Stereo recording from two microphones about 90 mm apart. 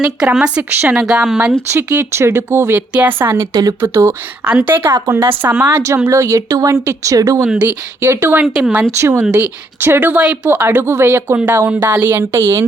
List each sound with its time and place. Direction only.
0.0 s speech: 10° right (ahead or behind)
0.7 s speech: 20° right (ahead or behind)
0.9 s speech: 5° right (ahead or behind)
1.7 s speech: 30° right (ahead or behind)
2.9 s speech: 15° right (ahead or behind)
3.2 s speech: 25° right (ahead or behind)
3.5 s speech: 45° right (ahead or behind)
3.8 s speech: 30° right (ahead or behind)
4.4 s speech: 20° right (ahead or behind)
4.9 s speech: 35° right (ahead or behind)
7.4 s speech: 15° right (ahead or behind)
8.0 s speech: 25° right (ahead or behind)
11.8 s speech: 25° right (ahead or behind)